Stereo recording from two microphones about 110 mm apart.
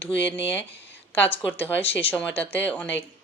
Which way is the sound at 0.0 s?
15° left (ahead or behind).